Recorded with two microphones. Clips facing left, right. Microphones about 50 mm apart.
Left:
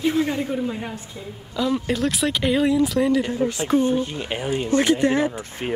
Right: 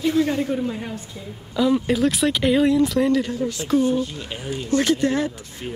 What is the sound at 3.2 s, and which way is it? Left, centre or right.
A man's voice, left.